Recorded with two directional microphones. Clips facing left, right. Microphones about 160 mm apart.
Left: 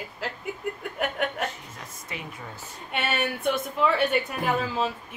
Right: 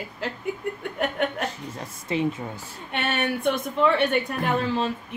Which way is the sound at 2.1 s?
25° right (ahead or behind).